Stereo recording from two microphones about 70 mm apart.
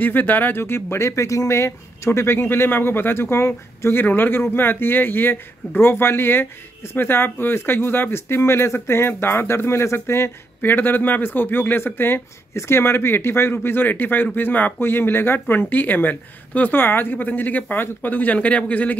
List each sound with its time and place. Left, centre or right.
0.0 s speech: left